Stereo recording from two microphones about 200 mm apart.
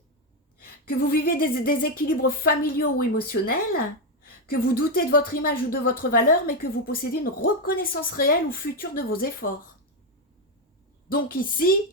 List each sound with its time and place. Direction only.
0.9 s a woman's voice: 45° left (ahead or behind)
11.1 s a woman's voice: 45° left (ahead or behind)